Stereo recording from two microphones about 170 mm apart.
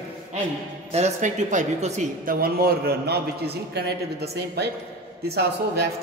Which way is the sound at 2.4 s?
65° right (ahead or behind).